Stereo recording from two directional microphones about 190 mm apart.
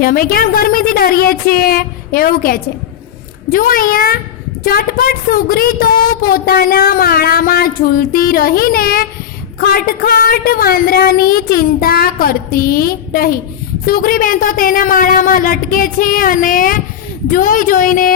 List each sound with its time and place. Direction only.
0.0 s speech: 50° left (ahead or behind)